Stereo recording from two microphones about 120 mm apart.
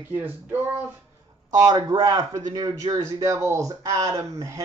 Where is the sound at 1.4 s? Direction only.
30° right (ahead or behind).